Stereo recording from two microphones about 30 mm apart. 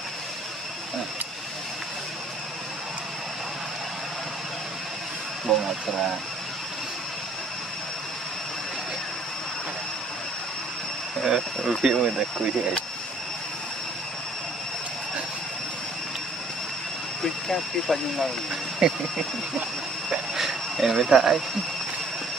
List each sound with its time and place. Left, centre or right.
5.5 s speech: left
11.2 s speech: centre
17.2 s speech: centre
18.8 s speech: right
20.1 s a sound: centre